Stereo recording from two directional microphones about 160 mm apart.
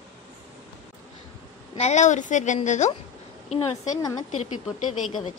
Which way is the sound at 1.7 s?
45° left (ahead or behind).